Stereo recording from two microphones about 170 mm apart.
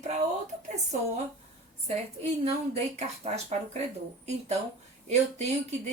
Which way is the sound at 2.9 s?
40° right (ahead or behind).